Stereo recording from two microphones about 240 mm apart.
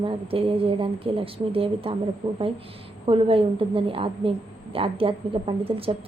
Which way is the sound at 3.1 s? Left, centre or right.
Right.